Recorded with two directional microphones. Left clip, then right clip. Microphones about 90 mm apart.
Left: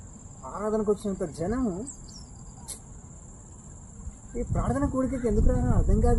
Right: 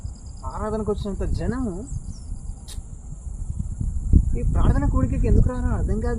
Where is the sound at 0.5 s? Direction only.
50° right (ahead or behind).